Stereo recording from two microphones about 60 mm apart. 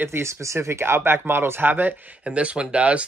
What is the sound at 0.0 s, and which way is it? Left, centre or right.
Speech, right.